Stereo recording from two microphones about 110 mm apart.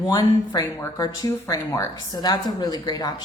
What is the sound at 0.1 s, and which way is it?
Speech, 35° left (ahead or behind).